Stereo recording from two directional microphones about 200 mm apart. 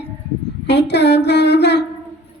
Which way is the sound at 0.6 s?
60° left (ahead or behind).